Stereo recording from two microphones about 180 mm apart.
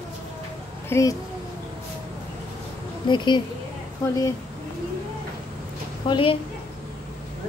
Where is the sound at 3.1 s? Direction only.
25° left (ahead or behind).